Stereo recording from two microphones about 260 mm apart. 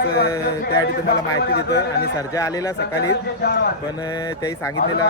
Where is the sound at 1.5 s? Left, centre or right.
Left.